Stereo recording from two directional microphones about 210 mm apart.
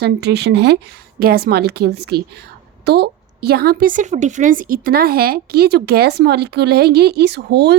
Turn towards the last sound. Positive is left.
turn(degrees=-50)  # may be behind; listen again after turning